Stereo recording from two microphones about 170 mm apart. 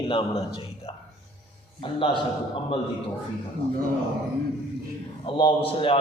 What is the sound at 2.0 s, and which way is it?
Speech, 30° left (ahead or behind).